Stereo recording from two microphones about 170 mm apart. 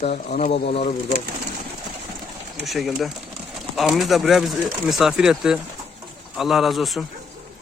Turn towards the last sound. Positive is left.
turn(degrees=0)  # may be behind; listen again after turning